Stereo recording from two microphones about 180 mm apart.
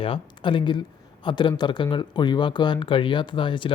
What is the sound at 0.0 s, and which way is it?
A man's voice, 30° left (ahead or behind).